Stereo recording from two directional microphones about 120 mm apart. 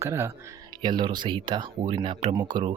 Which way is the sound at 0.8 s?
40° right (ahead or behind).